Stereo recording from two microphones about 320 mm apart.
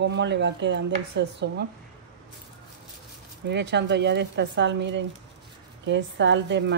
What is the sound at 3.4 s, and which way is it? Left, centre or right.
Speech, right.